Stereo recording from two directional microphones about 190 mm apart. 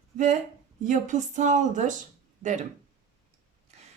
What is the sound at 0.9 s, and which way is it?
A woman's voice, 40° right (ahead or behind).